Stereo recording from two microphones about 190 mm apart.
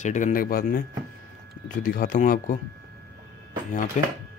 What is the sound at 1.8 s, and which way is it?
Speech, 50° left (ahead or behind).